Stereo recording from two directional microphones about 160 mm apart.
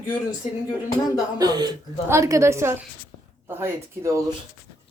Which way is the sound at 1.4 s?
25° right (ahead or behind).